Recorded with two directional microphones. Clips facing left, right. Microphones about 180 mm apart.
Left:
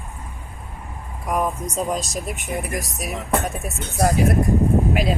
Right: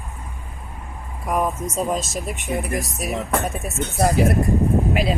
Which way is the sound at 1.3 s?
Centre (ahead or behind).